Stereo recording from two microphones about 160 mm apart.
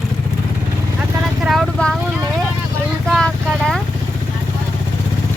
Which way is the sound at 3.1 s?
Centre (ahead or behind).